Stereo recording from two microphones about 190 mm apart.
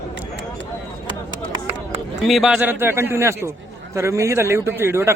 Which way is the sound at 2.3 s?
Centre (ahead or behind).